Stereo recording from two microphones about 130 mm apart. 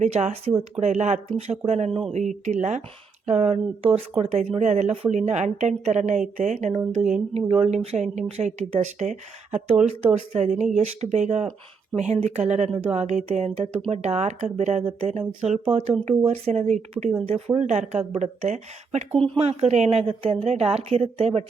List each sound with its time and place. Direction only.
0.0 s speech: 60° right (ahead or behind)
3.3 s a woman's voice: 50° right (ahead or behind)
17.2 s a woman's voice: 50° right (ahead or behind)